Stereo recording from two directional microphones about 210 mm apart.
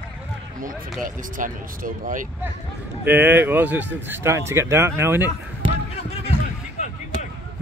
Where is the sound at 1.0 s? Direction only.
40° right (ahead or behind).